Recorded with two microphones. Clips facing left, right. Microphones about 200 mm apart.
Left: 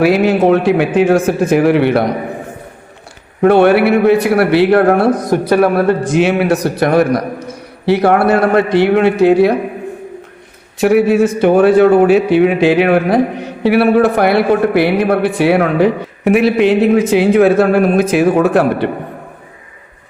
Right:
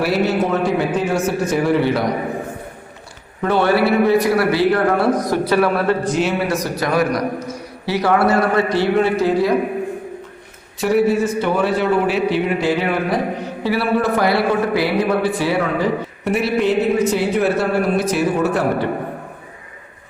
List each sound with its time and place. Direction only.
0.0 s speech: 90° left
1.0 s speech: 55° left (ahead or behind)
1.5 s a man's voice: 85° left; by 2.0 s 65° left (ahead or behind)
3.4 s a man's voice: 60° left (ahead or behind)
6.0 s a man's voice: 80° left
10.8 s a man's voice: 90° left; by 12.4 s 50° left (ahead or behind)
12.4 s speech: 90° left
13.7 s a man's voice: 70° left (ahead or behind)